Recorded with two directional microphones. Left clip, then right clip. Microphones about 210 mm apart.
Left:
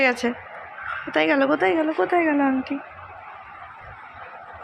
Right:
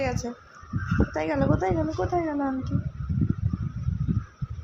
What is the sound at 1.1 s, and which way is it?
A woman's voice, 20° left (ahead or behind).